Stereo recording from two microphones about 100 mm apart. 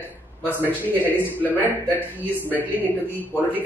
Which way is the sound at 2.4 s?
20° right (ahead or behind).